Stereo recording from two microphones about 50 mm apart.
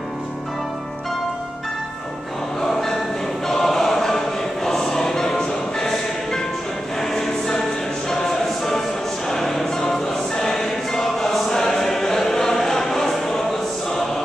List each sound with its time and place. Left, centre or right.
2.6 s music: centre
3.4 s choir: centre
4.6 s music: centre
7.0 s choir: centre
9.3 s music: centre